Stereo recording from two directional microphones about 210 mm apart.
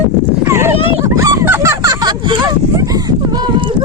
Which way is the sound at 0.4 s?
10° right (ahead or behind).